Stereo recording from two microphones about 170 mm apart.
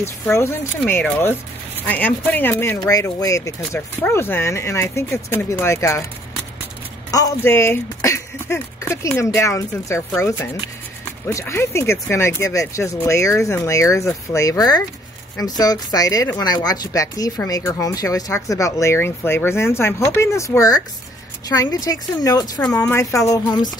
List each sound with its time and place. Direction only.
0.0 s speech: 15° left (ahead or behind)
7.1 s speech: 20° left (ahead or behind)
11.2 s speech: 15° left (ahead or behind)